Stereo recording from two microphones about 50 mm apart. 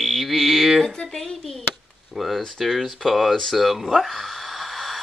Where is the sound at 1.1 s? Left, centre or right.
Centre.